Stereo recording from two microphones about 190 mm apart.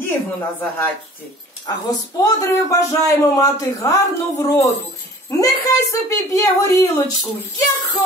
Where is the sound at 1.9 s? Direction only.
20° left (ahead or behind).